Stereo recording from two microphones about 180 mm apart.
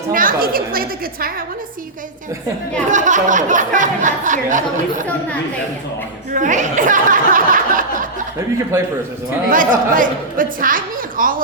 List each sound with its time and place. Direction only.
0.1 s speech: 50° right (ahead or behind)
2.9 s speech: 45° right (ahead or behind)
6.3 s speech: 45° right (ahead or behind)
8.7 s a man's voice: 15° right (ahead or behind)
9.5 s speech: 45° right (ahead or behind)